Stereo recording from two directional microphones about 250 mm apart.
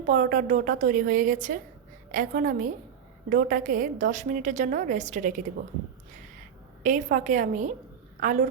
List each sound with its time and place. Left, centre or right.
0.0 s a woman's voice: right
6.8 s a woman's voice: right